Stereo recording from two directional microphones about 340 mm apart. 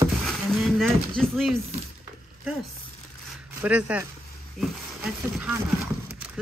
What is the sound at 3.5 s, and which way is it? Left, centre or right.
Speech, centre.